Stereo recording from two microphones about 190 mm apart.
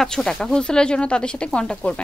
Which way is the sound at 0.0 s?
5° left (ahead or behind).